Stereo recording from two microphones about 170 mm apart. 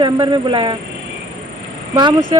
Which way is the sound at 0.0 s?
25° right (ahead or behind).